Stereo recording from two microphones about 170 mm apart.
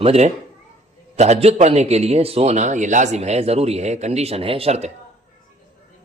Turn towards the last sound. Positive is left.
turn(degrees=-40)  # may be behind; listen again after turning